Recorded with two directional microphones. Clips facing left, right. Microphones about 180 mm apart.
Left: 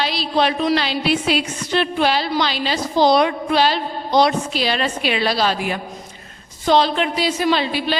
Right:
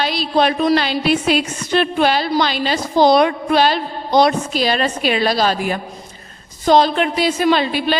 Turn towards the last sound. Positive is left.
turn(degrees=-50)  # may be behind; listen again after turning